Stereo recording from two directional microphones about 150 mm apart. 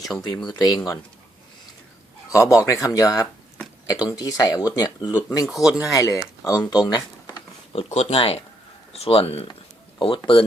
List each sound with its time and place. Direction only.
0.1 s speech: centre (ahead or behind)
0.4 s speech: 25° left (ahead or behind)
2.3 s speech: 20° left (ahead or behind)
5.5 s speech: centre (ahead or behind)
5.9 s speech: 25° left (ahead or behind)
6.7 s a sound: 25° left (ahead or behind)
7.8 s speech: 45° left (ahead or behind)